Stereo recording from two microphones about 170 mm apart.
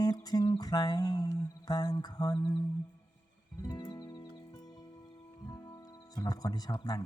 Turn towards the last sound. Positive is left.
turn(degrees=25)  # may be behind; listen again after turning